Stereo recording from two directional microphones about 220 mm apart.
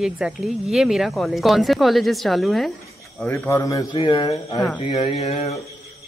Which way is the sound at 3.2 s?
10° left (ahead or behind).